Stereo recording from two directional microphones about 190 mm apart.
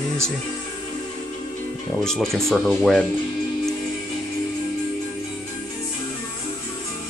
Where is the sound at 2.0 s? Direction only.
Centre (ahead or behind).